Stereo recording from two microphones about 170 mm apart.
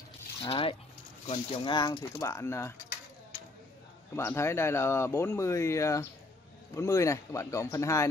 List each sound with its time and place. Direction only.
0.5 s speech: 35° left (ahead or behind); by 2.7 s 15° left (ahead or behind)
4.1 s speech: 15° left (ahead or behind)